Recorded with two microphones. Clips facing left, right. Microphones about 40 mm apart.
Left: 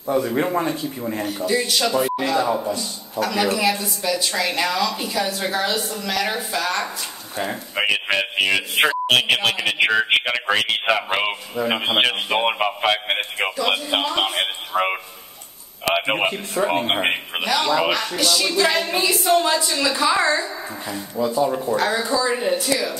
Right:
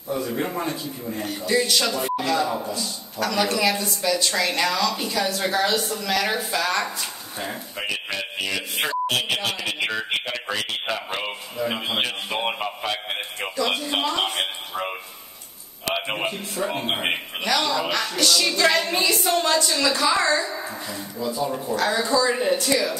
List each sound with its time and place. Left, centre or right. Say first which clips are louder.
0.1 s a man's voice: left 5 dB; left
0.5 s a woman's voice: left 5 dB; centre
1.2 s a woman's voice: even; centre
7.7 s music: left 10 dB; left
8.7 s speech: left 3 dB; centre
9.1 s a man's voice: left 6 dB; left
13.6 s a woman's voice: even; centre
15.9 s a man's voice: left 6 dB; left
16.6 s a man's voice: left 6 dB; centre
21.5 s a woman's voice: left 2 dB; centre